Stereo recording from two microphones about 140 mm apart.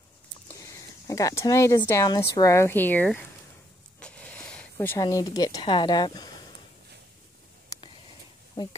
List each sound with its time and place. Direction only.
0.6 s speech: 25° left (ahead or behind)
4.0 s a sound: 10° left (ahead or behind)
4.9 s speech: 25° left (ahead or behind)